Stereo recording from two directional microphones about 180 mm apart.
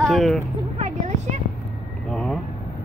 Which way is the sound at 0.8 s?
40° right (ahead or behind).